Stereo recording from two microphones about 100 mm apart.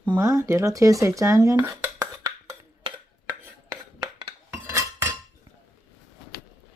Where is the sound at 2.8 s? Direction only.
65° right (ahead or behind).